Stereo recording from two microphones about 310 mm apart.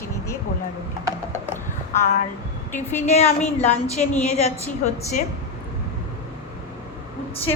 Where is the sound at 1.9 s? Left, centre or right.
Left.